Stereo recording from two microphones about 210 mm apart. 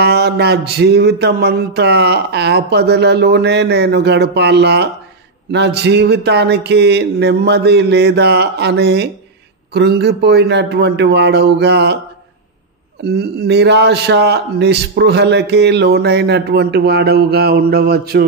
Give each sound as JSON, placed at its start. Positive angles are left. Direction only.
{"t": 0.0, "sound": "a man's voice", "side_deg": -50}
{"t": 13.0, "sound": "a man's voice", "side_deg": -50}